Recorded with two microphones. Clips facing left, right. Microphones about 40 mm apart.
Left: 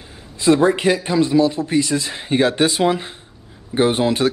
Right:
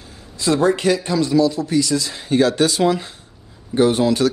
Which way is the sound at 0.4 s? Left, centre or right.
Left.